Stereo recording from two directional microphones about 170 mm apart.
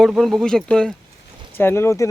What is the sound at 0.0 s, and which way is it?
Speech, centre (ahead or behind).